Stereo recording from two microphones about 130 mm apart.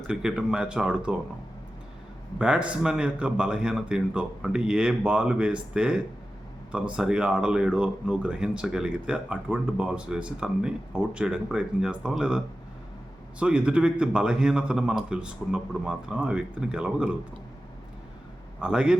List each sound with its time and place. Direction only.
0.1 s speech: 5° right (ahead or behind)
2.4 s speech: 10° right (ahead or behind)
13.4 s speech: 10° right (ahead or behind)
18.6 s speech: 5° right (ahead or behind)